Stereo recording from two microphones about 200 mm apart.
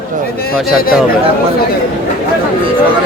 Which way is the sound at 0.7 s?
50° left (ahead or behind).